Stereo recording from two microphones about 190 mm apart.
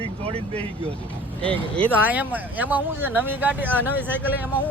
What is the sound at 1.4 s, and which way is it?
Speech, 5° left (ahead or behind).